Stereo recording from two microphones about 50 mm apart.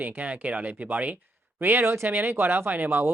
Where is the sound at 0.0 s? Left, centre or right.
Right.